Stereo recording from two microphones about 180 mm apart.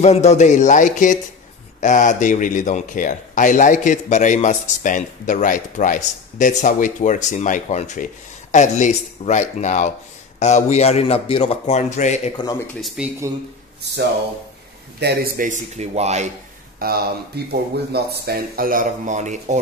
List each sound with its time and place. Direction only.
0.0 s a man's voice: 35° left (ahead or behind)
12.8 s speech: 5° right (ahead or behind)
15.0 s a man's voice: 60° right (ahead or behind); by 16.3 s 40° right (ahead or behind)
16.8 s speech: 60° right (ahead or behind); by 19.6 s 40° right (ahead or behind)